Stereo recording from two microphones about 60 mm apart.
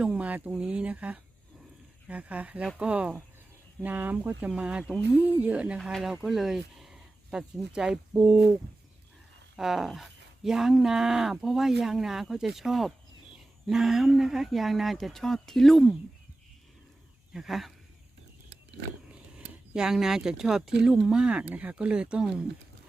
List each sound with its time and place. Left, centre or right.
0.0 s speech: right
3.8 s speech: right
6.0 s speech: centre
9.6 s speech: centre
17.3 s speech: centre
19.7 s speech: centre